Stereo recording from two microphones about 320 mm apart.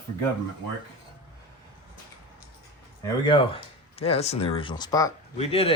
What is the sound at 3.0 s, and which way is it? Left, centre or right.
Speech, centre.